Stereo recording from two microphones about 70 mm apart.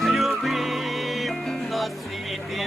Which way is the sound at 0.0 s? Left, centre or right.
Centre.